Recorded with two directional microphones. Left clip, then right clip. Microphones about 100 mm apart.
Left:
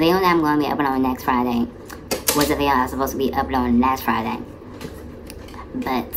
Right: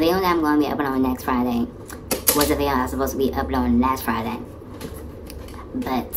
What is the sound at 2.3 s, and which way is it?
Speech, centre (ahead or behind).